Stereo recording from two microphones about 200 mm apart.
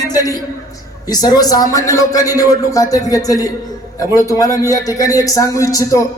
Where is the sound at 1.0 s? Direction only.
20° left (ahead or behind).